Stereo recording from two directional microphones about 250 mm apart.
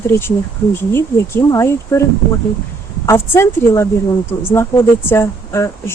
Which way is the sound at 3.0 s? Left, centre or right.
Centre.